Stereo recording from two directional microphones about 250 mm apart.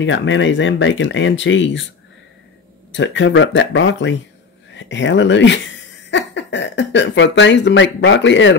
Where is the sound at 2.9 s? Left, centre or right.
Left.